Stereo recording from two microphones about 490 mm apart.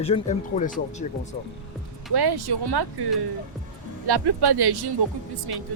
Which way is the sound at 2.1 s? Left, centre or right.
Right.